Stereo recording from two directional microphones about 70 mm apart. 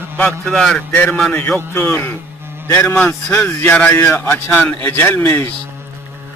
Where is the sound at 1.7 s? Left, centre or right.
Left.